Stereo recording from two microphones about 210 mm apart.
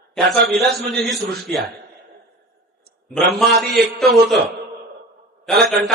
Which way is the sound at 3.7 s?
50° right (ahead or behind).